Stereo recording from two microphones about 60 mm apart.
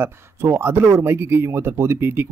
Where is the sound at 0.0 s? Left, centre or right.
Right.